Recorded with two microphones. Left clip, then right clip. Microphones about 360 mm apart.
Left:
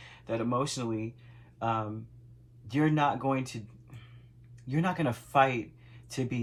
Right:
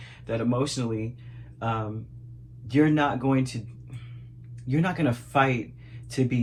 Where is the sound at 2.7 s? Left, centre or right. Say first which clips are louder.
Right 5 dB; centre.